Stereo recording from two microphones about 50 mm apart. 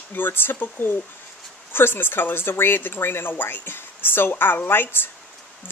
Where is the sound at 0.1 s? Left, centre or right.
Left.